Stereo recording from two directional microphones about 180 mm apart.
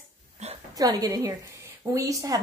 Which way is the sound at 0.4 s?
35° right (ahead or behind).